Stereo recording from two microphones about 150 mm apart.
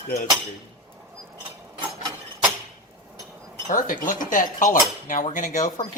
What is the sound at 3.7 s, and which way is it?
Cutlery, 65° left (ahead or behind).